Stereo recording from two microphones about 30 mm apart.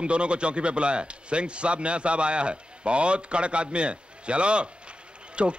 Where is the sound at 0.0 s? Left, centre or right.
Right.